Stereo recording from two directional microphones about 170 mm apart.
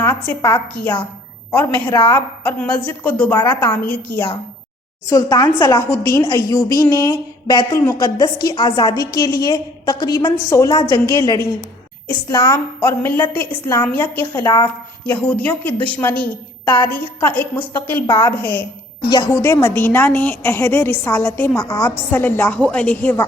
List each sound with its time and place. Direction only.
0.0 s a woman's voice: 15° left (ahead or behind)
1.6 s a woman's voice: 20° left (ahead or behind)
3.8 s a woman's voice: 10° left (ahead or behind)
14.4 s a woman's voice: 25° left (ahead or behind)
15.0 s a woman's voice: 10° left (ahead or behind)